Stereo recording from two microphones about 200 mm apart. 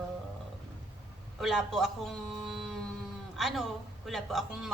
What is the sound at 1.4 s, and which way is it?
A man's voice, centre (ahead or behind).